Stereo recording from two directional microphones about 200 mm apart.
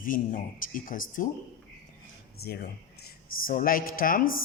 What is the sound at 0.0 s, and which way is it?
Speech, 40° left (ahead or behind).